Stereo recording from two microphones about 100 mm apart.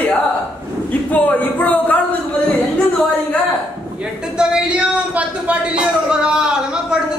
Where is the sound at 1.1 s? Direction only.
15° left (ahead or behind).